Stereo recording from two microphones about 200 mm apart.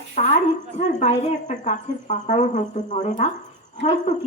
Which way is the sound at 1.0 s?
35° left (ahead or behind).